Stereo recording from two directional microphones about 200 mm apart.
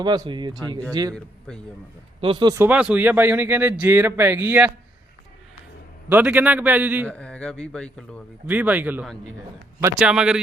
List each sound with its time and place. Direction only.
0.0 s speech: 20° right (ahead or behind)
2.2 s speech: 20° right (ahead or behind)
2.6 s speech: 5° right (ahead or behind)
6.1 s speech: 5° right (ahead or behind)
7.1 s speech: 5° left (ahead or behind)
8.4 s speech: 10° right (ahead or behind)